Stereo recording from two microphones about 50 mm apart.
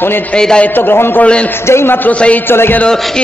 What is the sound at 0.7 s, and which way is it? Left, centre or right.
Speech, left.